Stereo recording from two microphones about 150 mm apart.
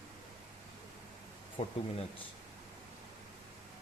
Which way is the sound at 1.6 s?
45° left (ahead or behind).